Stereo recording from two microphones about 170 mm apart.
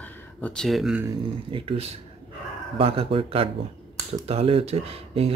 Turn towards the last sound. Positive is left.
turn(degrees=-35)  # may be behind; listen again after turning